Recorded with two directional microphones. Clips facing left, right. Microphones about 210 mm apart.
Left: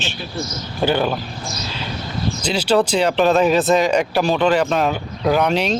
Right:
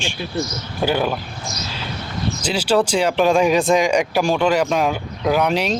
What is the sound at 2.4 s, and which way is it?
Speech, 10° right (ahead or behind).